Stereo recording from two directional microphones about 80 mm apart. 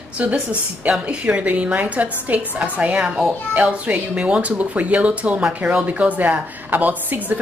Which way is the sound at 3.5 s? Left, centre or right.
Centre.